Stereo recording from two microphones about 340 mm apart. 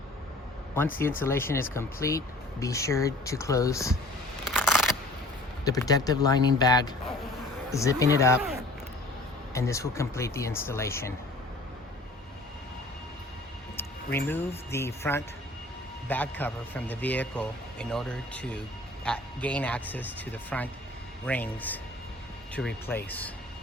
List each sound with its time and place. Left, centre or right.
0.8 s speech: centre
4.4 s a sound: centre
5.6 s speech: centre
9.6 s speech: centre
14.3 s a man's voice: centre